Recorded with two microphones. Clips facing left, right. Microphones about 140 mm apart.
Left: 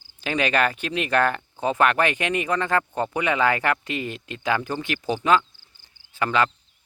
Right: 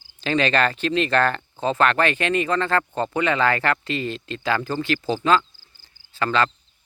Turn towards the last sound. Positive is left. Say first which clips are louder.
# right 1 dB
turn(degrees=15)  # may be behind; listen again after turning